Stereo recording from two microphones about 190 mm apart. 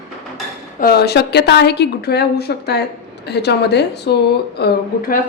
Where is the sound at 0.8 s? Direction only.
55° left (ahead or behind).